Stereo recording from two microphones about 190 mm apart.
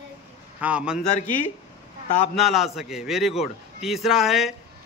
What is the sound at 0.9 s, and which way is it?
Speech, 40° left (ahead or behind).